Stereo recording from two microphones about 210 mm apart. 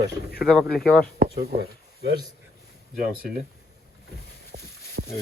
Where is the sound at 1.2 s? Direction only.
50° right (ahead or behind).